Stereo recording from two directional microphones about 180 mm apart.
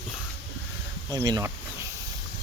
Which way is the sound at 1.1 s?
20° right (ahead or behind).